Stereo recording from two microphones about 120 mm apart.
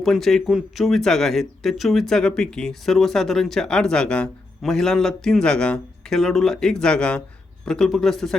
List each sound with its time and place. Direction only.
0.0 s speech: centre (ahead or behind)